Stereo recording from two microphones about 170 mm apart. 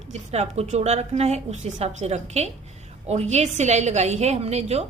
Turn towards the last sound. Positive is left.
turn(degrees=-40)  # may be behind; listen again after turning